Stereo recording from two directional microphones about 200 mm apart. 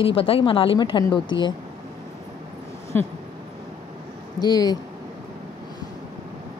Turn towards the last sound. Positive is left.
turn(degrees=20)  # may be behind; listen again after turning